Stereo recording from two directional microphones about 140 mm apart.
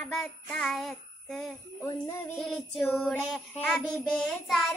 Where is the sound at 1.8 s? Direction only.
20° left (ahead or behind).